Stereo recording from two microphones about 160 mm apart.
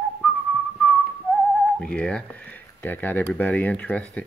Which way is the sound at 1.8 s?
5° left (ahead or behind).